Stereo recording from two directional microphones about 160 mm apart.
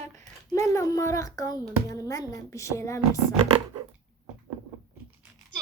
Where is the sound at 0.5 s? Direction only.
20° left (ahead or behind).